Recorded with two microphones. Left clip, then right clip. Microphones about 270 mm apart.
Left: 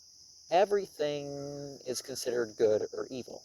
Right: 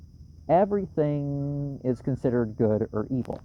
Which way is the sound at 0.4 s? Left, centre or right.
Left.